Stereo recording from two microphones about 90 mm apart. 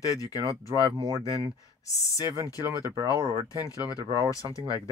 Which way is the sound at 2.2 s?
35° right (ahead or behind).